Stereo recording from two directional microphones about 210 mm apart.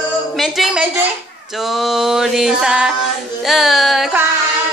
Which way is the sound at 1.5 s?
Centre (ahead or behind).